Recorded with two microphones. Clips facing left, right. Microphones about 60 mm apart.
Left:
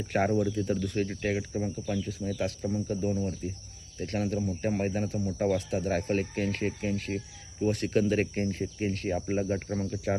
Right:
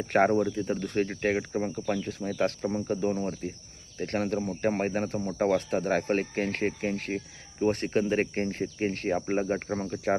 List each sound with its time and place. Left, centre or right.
0.1 s speech: right
0.4 s speech: right
0.8 s speech: right
9.8 s speech: right